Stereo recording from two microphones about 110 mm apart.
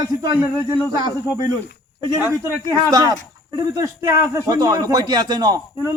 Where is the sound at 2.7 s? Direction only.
35° right (ahead or behind).